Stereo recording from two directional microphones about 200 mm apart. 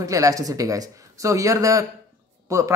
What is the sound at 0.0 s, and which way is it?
Speech, 15° right (ahead or behind).